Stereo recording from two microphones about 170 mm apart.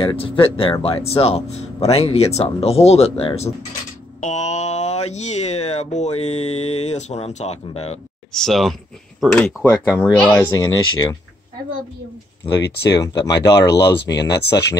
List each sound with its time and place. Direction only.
0.0 s speech: 30° left (ahead or behind)
8.3 s speech: centre (ahead or behind)
10.4 s speech: 20° left (ahead or behind)
13.0 s speech: 20° left (ahead or behind)
14.3 s speech: 80° left